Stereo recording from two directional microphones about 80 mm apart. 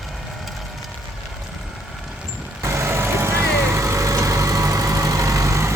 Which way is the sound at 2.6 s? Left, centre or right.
Right.